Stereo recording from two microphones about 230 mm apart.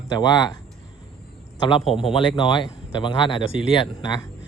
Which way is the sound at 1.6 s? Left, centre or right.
Left.